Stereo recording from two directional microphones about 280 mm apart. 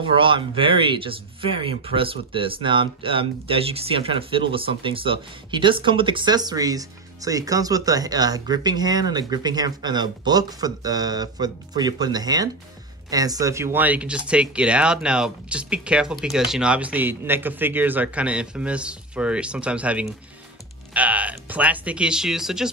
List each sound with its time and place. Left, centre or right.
0.0 s speech: centre